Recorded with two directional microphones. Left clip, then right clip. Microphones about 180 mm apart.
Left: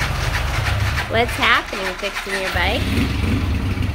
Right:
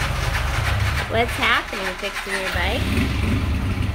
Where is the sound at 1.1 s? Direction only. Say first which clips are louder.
Left 3 dB; 5° right (ahead or behind).